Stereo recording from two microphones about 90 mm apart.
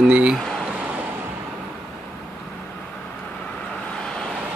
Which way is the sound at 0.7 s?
15° right (ahead or behind).